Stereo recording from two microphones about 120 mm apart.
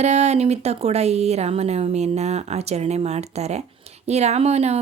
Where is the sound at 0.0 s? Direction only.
70° right (ahead or behind).